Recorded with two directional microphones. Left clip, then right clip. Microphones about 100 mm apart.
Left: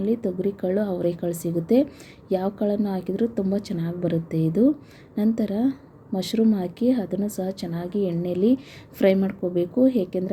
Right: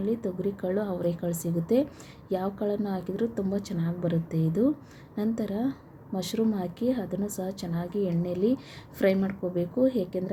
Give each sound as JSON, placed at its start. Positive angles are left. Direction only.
{"t": 0.0, "sound": "a woman's voice", "side_deg": 40}